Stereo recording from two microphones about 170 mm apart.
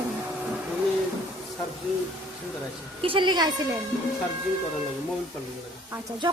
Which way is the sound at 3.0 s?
30° right (ahead or behind).